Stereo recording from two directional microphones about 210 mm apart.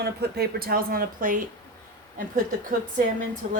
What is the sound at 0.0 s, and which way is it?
Speech, 50° right (ahead or behind).